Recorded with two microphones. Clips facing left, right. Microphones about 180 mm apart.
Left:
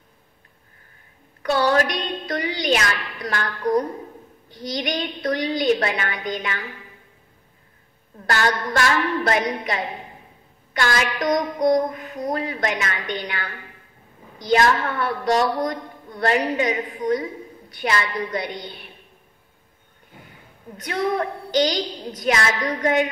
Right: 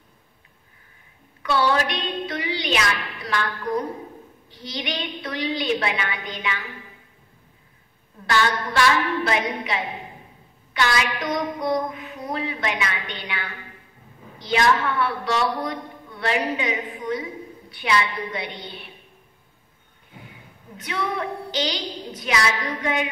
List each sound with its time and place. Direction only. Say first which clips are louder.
1.4 s a woman's voice: left 2 dB; 45° left (ahead or behind)
3.3 s mantra: left 3 dB; 45° left (ahead or behind)
8.3 s mantra: left 1 dB; 45° left (ahead or behind)
20.7 s mantra: left 4 dB; 45° left (ahead or behind)